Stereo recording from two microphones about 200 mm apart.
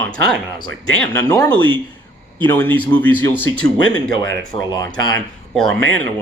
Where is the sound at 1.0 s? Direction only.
10° left (ahead or behind).